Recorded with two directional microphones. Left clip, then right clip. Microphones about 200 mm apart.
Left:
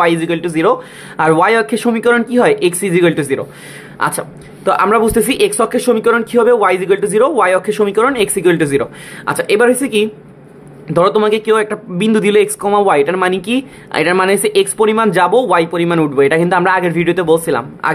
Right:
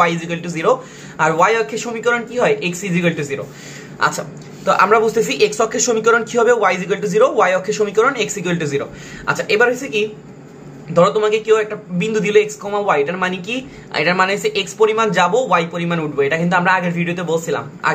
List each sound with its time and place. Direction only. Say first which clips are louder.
0.0 s a woman's voice: left 4 dB; 50° left (ahead or behind)
4.0 s a woman's voice: left 1 dB; 45° left (ahead or behind)